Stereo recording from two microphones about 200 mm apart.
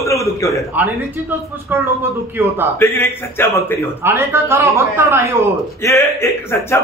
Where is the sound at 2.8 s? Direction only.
10° left (ahead or behind).